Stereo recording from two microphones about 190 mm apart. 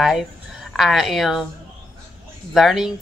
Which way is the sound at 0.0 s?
Centre (ahead or behind).